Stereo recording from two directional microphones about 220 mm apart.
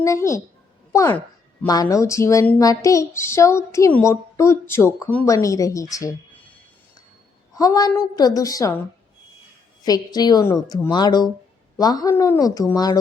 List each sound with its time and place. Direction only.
0.0 s speech: 15° left (ahead or behind)
7.5 s speech: 15° left (ahead or behind)
9.8 s speech: 15° left (ahead or behind)